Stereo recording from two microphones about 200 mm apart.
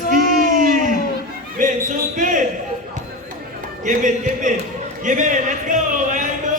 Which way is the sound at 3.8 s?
40° right (ahead or behind).